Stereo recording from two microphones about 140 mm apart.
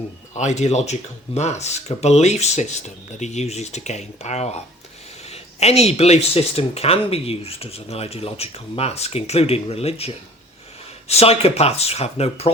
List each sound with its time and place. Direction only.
0.3 s speech: 55° left (ahead or behind)
11.1 s speech: 45° left (ahead or behind)